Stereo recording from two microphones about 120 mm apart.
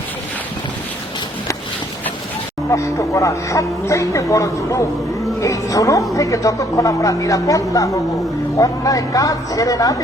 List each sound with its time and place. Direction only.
2.6 s speech: 25° left (ahead or behind)